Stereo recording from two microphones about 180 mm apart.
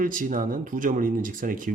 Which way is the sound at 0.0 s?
50° right (ahead or behind).